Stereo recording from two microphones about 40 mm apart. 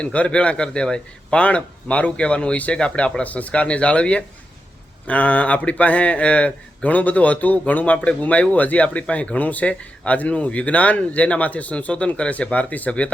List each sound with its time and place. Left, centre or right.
0.0 s a man's voice: left
1.5 s a man's voice: left
9.4 s speech: left